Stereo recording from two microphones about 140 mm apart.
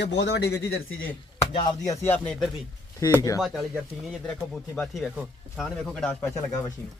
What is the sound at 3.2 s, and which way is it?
Chop, 25° left (ahead or behind).